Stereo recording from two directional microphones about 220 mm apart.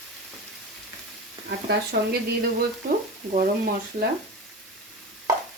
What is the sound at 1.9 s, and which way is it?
Speech, 50° right (ahead or behind).